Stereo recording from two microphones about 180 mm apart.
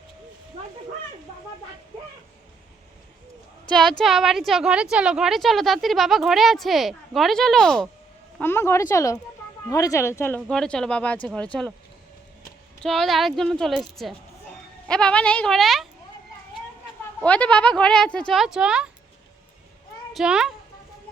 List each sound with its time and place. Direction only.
3.7 s a woman's voice: 5° left (ahead or behind)
12.8 s a woman's voice: centre (ahead or behind)
17.2 s a woman's voice: 5° left (ahead or behind)
20.1 s a woman's voice: 5° right (ahead or behind)